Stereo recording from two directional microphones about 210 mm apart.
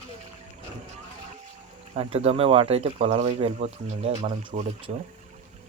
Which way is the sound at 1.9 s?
30° right (ahead or behind).